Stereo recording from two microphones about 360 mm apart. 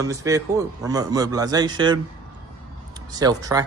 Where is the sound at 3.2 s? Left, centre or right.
Centre.